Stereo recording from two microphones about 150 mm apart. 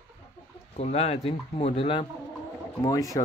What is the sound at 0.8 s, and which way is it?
Speech, 45° left (ahead or behind).